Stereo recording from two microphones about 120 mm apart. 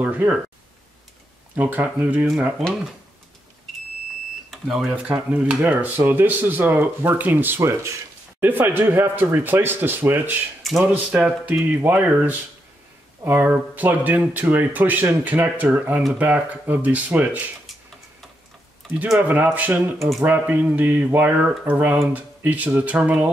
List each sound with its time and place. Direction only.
0.0 s speech: 15° right (ahead or behind)
1.5 s speech: 15° right (ahead or behind)
4.5 s smoke detector: centre (ahead or behind)
4.9 s speech: 10° right (ahead or behind)
18.9 s speech: 15° right (ahead or behind)